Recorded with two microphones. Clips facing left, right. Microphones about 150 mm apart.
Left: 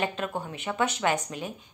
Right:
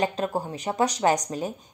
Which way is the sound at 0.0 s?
35° right (ahead or behind).